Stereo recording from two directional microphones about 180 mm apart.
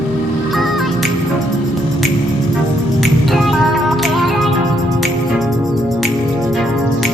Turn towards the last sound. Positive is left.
turn(degrees=0)  # may be behind; listen again after turning